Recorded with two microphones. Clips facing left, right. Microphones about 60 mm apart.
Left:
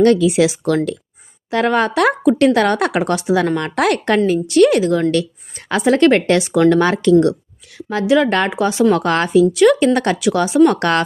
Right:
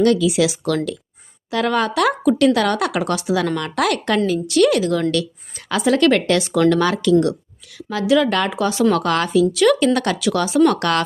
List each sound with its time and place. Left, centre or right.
0.0 s speech: left
9.0 s speech: left